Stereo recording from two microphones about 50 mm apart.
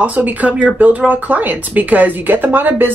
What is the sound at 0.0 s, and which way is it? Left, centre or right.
Speech, right.